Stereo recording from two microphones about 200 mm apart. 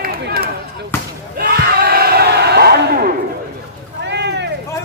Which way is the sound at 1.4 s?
50° right (ahead or behind).